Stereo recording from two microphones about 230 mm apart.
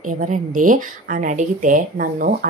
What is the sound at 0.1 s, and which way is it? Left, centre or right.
Speech, right.